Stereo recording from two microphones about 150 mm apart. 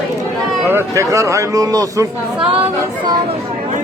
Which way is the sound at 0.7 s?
20° right (ahead or behind).